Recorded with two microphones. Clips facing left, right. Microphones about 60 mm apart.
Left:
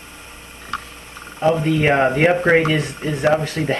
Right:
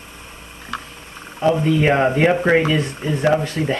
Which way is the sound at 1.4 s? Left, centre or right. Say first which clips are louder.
Even; centre.